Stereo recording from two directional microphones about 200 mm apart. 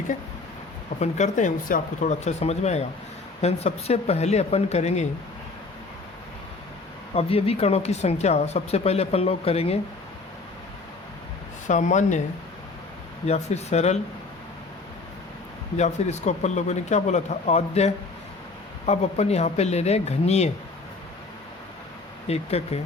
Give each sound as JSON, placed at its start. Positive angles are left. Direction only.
{"t": 0.9, "sound": "speech", "side_deg": 35}
{"t": 7.1, "sound": "speech", "side_deg": 30}
{"t": 11.7, "sound": "speech", "side_deg": 35}
{"t": 13.2, "sound": "speech", "side_deg": 35}
{"t": 15.8, "sound": "speech", "side_deg": 35}
{"t": 22.3, "sound": "speech", "side_deg": 30}